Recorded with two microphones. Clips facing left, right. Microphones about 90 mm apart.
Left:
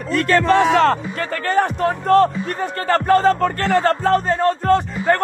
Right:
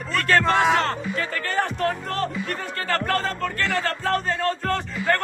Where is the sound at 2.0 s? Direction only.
40° left (ahead or behind); by 3.3 s 25° left (ahead or behind).